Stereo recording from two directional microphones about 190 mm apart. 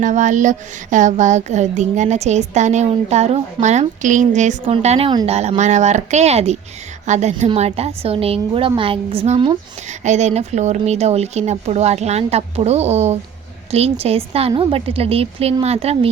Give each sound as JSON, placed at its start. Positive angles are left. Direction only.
{"t": 0.0, "sound": "a woman's voice", "side_deg": -40}